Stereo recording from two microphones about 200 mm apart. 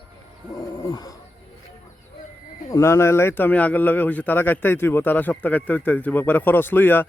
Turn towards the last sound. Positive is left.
turn(degrees=10)  # may be behind; listen again after turning